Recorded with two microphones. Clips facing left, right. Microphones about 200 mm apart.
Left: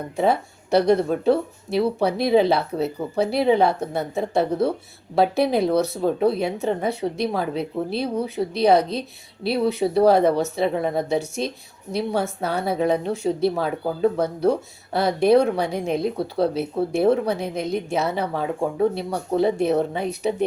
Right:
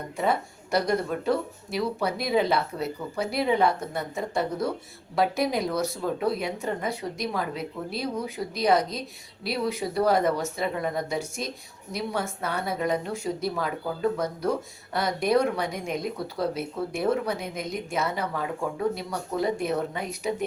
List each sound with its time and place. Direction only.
0.2 s speech: 30° left (ahead or behind)
5.7 s speech: 65° left (ahead or behind)
6.0 s speech: 30° left (ahead or behind)